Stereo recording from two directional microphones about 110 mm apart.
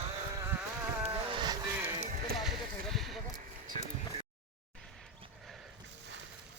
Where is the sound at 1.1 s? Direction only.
40° right (ahead or behind).